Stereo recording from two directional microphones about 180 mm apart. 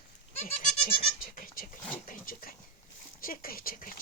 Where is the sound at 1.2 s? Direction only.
50° left (ahead or behind).